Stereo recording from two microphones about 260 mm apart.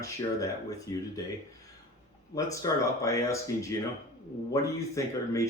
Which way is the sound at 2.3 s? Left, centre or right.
Centre.